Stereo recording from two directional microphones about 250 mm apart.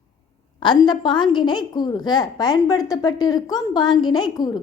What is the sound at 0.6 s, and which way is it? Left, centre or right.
A woman's voice, centre.